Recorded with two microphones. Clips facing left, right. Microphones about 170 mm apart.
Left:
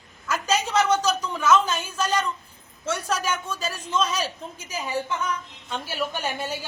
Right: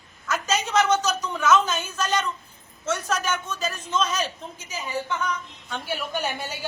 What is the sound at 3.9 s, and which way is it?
Speech, 10° left (ahead or behind).